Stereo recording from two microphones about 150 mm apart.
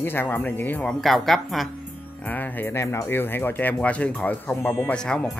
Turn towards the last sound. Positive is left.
turn(degrees=5)  # may be behind; listen again after turning